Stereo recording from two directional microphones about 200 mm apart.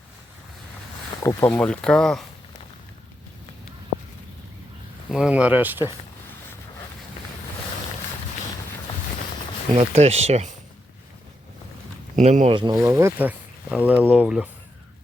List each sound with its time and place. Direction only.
1.2 s speech: 15° left (ahead or behind)
5.1 s speech: 5° right (ahead or behind)
9.7 s speech: 30° right (ahead or behind)
12.1 s speech: 35° right (ahead or behind)
12.5 s speech: 20° right (ahead or behind)